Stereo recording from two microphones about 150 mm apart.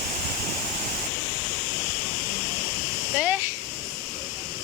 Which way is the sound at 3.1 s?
5° right (ahead or behind).